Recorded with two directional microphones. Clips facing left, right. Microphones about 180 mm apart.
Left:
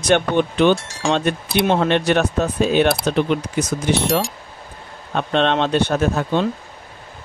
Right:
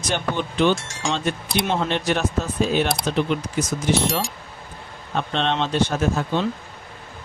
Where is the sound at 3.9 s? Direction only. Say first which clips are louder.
Left 4 dB; centre (ahead or behind).